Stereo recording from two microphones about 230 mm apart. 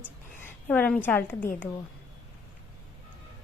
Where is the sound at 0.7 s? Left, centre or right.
Centre.